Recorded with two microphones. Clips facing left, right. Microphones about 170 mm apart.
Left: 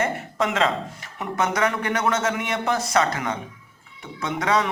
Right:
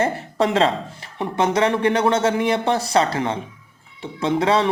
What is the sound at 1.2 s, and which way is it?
Speech, 30° right (ahead or behind).